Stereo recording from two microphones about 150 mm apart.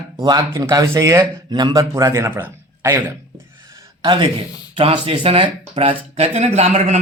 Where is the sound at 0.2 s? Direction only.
25° right (ahead or behind).